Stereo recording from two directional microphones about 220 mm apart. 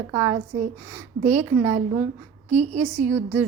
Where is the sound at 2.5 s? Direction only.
30° right (ahead or behind).